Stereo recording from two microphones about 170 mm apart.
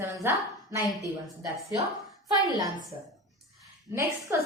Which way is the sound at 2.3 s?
20° right (ahead or behind).